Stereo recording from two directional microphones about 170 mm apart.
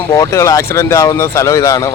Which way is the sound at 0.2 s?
20° left (ahead or behind).